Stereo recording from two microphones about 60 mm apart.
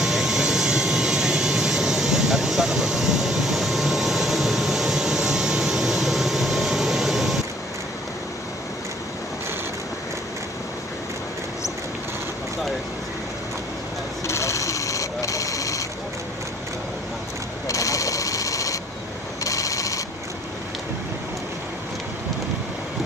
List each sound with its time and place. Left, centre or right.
0.0 s vehicle: centre
14.2 s vehicle: left
17.6 s a sound: left